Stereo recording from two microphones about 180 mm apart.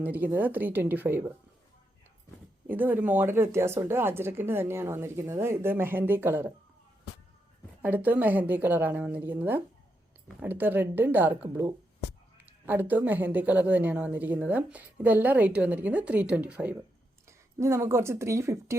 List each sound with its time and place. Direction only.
0.0 s a woman's voice: 10° right (ahead or behind)
2.6 s a woman's voice: 10° right (ahead or behind)
7.8 s a woman's voice: 10° right (ahead or behind)